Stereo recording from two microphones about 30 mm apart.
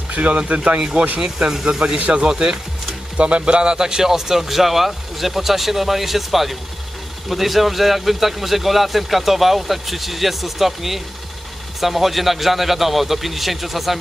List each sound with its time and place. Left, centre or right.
0.1 s speech: right
0.7 s speech: right
3.2 s a man's voice: right; by 13.9 s centre